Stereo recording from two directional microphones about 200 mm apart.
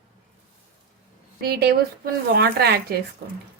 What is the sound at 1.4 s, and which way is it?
A woman's voice, 50° right (ahead or behind).